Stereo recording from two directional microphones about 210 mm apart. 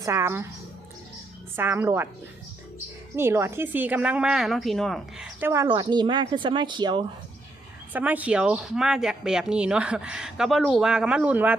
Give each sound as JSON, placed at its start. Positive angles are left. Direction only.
{"t": 0.0, "sound": "a woman's voice", "side_deg": -10}
{"t": 1.5, "sound": "a woman's voice", "side_deg": -10}
{"t": 3.2, "sound": "a woman's voice", "side_deg": -10}
{"t": 5.6, "sound": "speech", "side_deg": -20}
{"t": 7.9, "sound": "speech", "side_deg": -5}